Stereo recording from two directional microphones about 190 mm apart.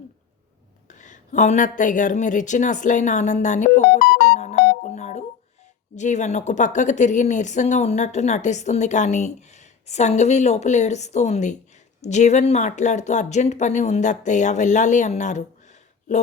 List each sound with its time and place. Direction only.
0.9 s speech: 40° left (ahead or behind)
3.8 s music: 60° left (ahead or behind)
4.9 s music: 35° left (ahead or behind)
6.0 s speech: 40° left (ahead or behind)